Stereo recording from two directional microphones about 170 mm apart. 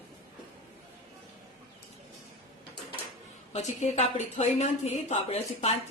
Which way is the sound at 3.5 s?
40° left (ahead or behind).